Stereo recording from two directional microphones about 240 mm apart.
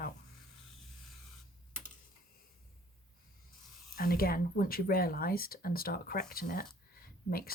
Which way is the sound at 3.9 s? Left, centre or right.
Left.